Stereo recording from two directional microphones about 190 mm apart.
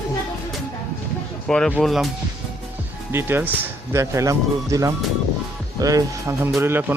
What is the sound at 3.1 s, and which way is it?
Speech, 10° right (ahead or behind).